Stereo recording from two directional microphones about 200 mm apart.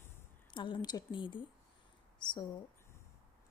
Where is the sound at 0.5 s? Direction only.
25° left (ahead or behind).